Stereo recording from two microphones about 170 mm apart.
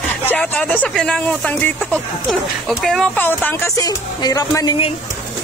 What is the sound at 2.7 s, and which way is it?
Speech, 5° left (ahead or behind).